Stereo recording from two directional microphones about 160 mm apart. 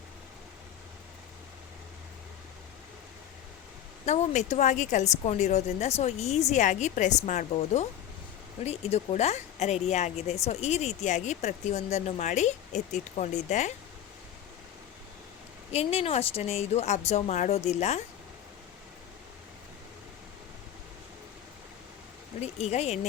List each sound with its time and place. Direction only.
4.0 s a woman's voice: 45° left (ahead or behind)
15.7 s a woman's voice: 40° left (ahead or behind)
22.4 s a woman's voice: 45° left (ahead or behind)